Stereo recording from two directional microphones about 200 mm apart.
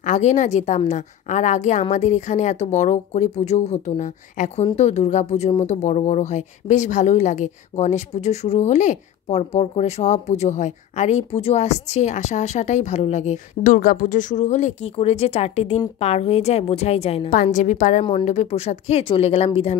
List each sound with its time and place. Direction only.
0.0 s speech: 35° left (ahead or behind)
17.3 s speech: 40° left (ahead or behind)